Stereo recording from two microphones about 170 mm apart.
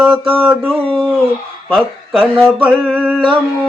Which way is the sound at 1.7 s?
Centre (ahead or behind).